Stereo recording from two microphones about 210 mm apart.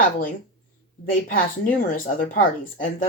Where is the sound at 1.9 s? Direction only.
40° left (ahead or behind).